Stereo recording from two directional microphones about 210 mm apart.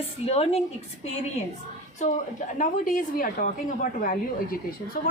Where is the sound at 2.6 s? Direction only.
40° left (ahead or behind).